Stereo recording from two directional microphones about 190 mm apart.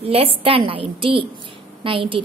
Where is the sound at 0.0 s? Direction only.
30° right (ahead or behind).